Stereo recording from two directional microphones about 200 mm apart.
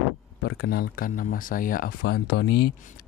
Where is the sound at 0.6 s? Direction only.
50° left (ahead or behind).